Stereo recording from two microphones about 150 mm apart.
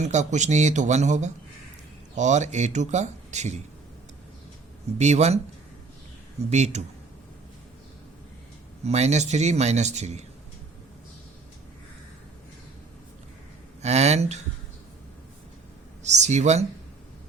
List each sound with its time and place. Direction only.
0.0 s speech: 50° right (ahead or behind)
4.9 s speech: 50° right (ahead or behind)
6.5 s speech: 50° right (ahead or behind)
8.8 s speech: 50° right (ahead or behind)
13.8 s speech: 45° right (ahead or behind)
16.0 s speech: 50° right (ahead or behind)